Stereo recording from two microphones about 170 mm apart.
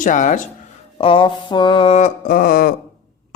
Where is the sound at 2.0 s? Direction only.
55° left (ahead or behind).